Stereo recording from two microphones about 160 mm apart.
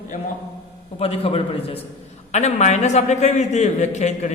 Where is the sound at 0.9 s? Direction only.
35° left (ahead or behind).